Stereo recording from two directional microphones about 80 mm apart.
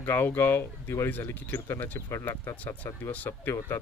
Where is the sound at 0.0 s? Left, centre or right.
Left.